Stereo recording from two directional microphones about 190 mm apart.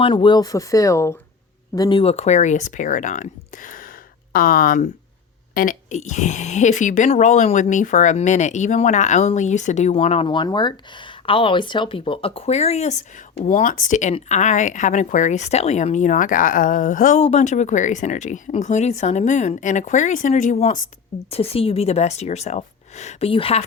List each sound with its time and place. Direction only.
0.0 s speech: 25° left (ahead or behind)